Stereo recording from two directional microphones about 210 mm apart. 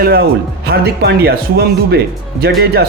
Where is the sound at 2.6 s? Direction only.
50° right (ahead or behind).